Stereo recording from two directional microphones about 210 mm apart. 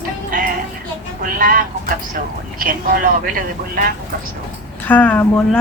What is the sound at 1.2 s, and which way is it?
Speech, 40° right (ahead or behind).